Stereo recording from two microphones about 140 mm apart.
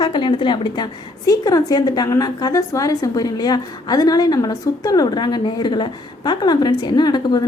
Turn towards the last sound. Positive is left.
turn(degrees=30)  # may be behind; listen again after turning